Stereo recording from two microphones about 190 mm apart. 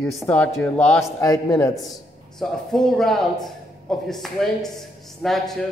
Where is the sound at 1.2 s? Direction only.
20° left (ahead or behind).